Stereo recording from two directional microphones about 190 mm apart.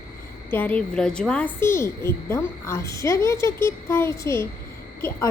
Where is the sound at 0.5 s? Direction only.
10° left (ahead or behind).